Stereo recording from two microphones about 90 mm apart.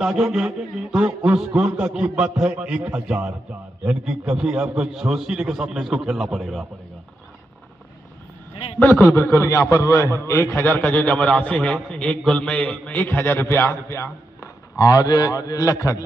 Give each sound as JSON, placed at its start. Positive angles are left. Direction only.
{"t": 0.0, "sound": "a man's voice", "side_deg": -5}
{"t": 8.7, "sound": "a man's voice", "side_deg": 20}
{"t": 14.8, "sound": "a man's voice", "side_deg": 45}